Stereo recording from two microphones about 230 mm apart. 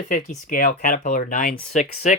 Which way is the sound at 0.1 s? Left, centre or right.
Left.